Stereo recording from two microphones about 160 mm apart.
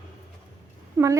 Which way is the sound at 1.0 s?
15° right (ahead or behind).